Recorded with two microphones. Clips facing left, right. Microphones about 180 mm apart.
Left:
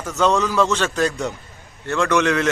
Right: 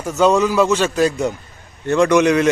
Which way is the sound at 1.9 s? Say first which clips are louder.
Right 5 dB; 15° right (ahead or behind).